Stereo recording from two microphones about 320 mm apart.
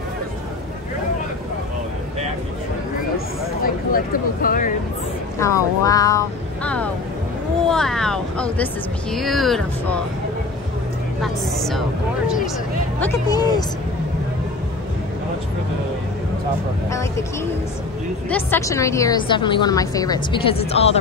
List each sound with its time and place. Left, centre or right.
3.6 s speech: left
5.4 s speech: centre
13.0 s a woman's voice: centre
18.3 s a woman's voice: centre